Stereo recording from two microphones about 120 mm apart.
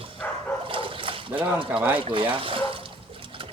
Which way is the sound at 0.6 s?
45° right (ahead or behind).